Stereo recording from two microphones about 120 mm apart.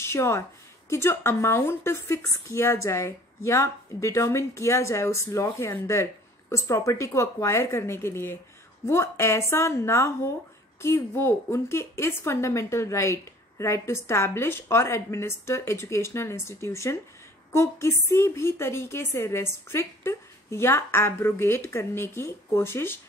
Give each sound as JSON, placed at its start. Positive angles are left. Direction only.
{"t": 0.0, "sound": "a woman's voice", "side_deg": 20}